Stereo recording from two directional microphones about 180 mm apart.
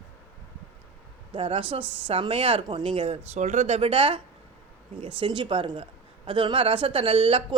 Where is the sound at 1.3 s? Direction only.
30° right (ahead or behind).